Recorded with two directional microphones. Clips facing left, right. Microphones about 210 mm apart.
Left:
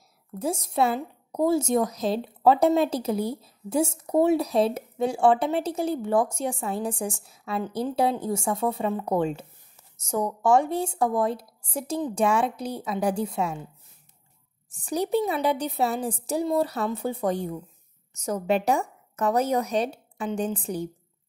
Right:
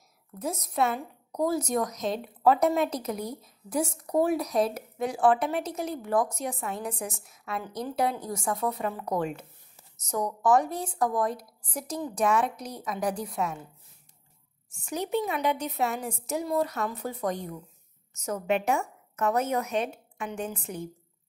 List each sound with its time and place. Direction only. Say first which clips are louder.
0.4 s a woman's voice: left 4 dB; 30° left (ahead or behind)
14.7 s a woman's voice: left 5 dB; 35° left (ahead or behind)